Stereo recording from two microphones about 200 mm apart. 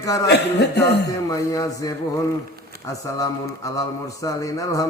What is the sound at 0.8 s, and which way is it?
Speech, 15° left (ahead or behind).